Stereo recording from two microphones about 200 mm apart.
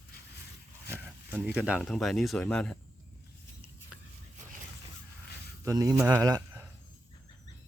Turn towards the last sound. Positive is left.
turn(degrees=-15)  # may be behind; listen again after turning